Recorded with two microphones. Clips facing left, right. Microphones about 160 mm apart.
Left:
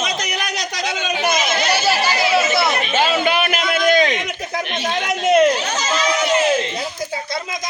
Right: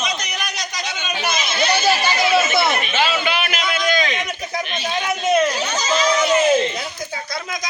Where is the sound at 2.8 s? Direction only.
40° left (ahead or behind); by 5.5 s 75° left (ahead or behind).